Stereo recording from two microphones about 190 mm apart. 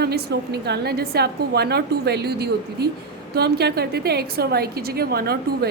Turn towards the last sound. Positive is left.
turn(degrees=-55)  # may be behind; listen again after turning